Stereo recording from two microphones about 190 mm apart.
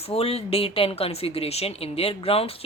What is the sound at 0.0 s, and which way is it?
Speech, 30° left (ahead or behind).